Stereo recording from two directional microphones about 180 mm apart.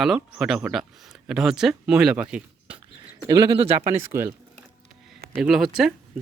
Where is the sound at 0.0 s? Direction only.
5° right (ahead or behind).